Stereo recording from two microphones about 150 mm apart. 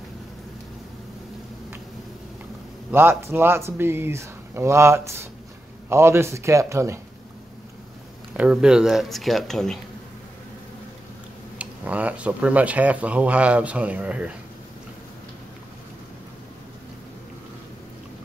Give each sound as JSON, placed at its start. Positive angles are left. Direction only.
{"t": 2.9, "sound": "a man's voice", "side_deg": -15}
{"t": 8.3, "sound": "speech", "side_deg": -10}
{"t": 11.5, "sound": "speech", "side_deg": -10}